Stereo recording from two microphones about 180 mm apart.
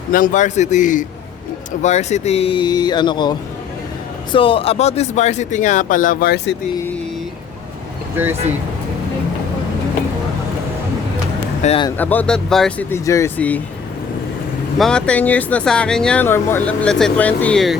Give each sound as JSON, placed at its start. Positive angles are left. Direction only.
{"t": 0.1, "sound": "a man's voice", "side_deg": 45}
{"t": 8.1, "sound": "speech", "side_deg": -10}
{"t": 11.6, "sound": "speech", "side_deg": 35}
{"t": 11.9, "sound": "speech", "side_deg": 10}
{"t": 12.9, "sound": "speech", "side_deg": 15}
{"t": 14.8, "sound": "speech", "side_deg": 5}